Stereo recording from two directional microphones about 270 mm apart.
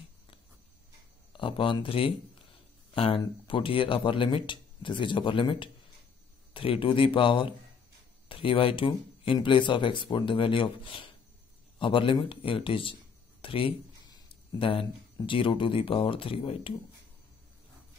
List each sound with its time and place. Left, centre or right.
1.3 s speech: centre